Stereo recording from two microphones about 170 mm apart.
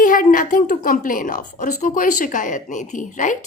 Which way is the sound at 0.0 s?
50° left (ahead or behind).